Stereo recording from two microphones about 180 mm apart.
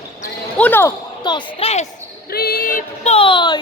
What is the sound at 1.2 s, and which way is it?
Speech, 25° left (ahead or behind).